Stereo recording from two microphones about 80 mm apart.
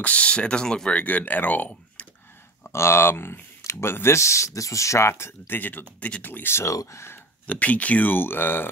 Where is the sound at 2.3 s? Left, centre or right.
Left.